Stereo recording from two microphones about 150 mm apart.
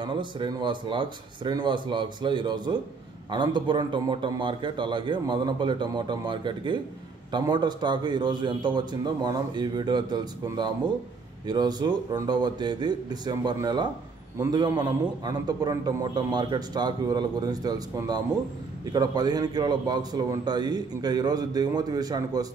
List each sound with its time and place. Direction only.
0.0 s a man's voice: 30° right (ahead or behind)